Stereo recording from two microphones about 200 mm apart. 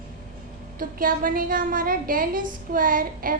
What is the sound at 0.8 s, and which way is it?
A woman's voice, 45° right (ahead or behind).